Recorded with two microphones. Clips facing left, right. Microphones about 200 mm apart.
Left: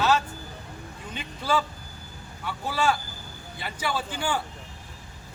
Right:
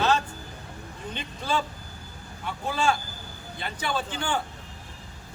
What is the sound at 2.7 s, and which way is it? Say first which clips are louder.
A man's voice: even; 5° left (ahead or behind).